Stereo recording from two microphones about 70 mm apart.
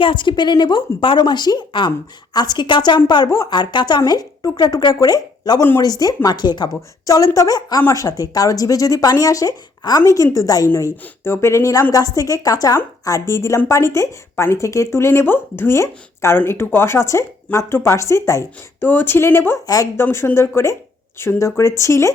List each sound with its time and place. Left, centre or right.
0.3 s a woman's voice: left
2.3 s a woman's voice: left
3.2 s speech: left
3.5 s speech: left
4.9 s speech: left
6.2 s a woman's voice: left
7.0 s a woman's voice: left
11.2 s speech: left
18.8 s speech: left
19.6 s speech: left
20.0 s speech: left